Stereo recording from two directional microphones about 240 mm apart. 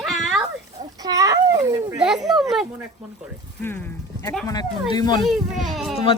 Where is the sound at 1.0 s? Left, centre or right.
Centre.